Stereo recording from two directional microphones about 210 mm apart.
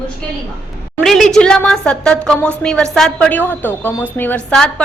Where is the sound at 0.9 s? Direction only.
Centre (ahead or behind).